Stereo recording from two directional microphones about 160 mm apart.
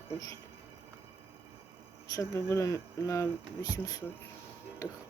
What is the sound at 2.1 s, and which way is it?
Speech, 15° left (ahead or behind).